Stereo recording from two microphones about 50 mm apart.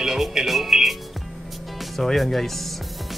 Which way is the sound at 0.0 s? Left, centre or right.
Centre.